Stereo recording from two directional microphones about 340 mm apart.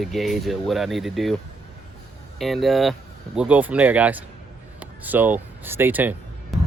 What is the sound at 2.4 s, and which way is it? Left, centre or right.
Speech, centre.